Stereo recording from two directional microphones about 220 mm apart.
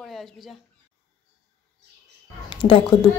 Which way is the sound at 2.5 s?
20° left (ahead or behind).